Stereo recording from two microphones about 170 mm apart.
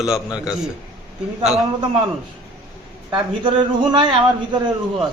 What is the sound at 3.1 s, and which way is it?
A man's voice, 25° right (ahead or behind).